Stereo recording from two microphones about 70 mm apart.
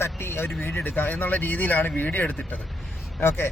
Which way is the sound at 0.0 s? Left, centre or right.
Left.